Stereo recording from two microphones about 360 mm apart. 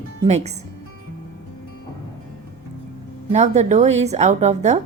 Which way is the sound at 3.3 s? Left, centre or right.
Centre.